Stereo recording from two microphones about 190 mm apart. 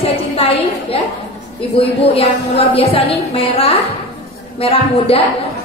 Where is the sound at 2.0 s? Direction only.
30° left (ahead or behind).